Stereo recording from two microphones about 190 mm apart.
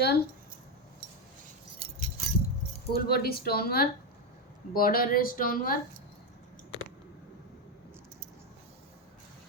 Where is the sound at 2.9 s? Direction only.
55° left (ahead or behind).